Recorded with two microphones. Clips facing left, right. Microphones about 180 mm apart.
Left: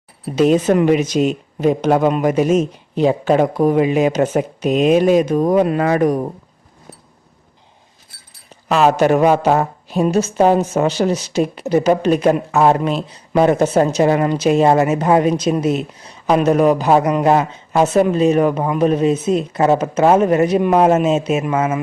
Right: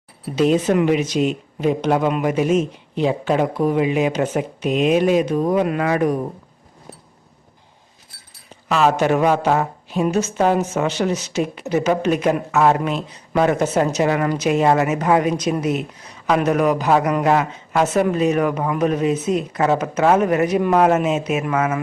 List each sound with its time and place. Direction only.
0.3 s speech: 45° left (ahead or behind)
8.7 s a woman's voice: 40° left (ahead or behind); by 21.8 s 25° left (ahead or behind)